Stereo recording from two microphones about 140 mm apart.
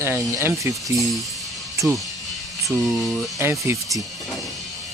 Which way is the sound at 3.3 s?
20° right (ahead or behind).